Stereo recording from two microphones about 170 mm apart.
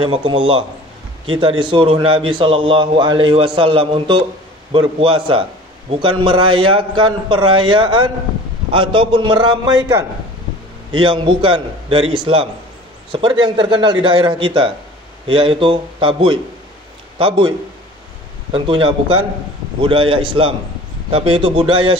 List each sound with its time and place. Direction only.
0.0 s a man's voice: 30° right (ahead or behind)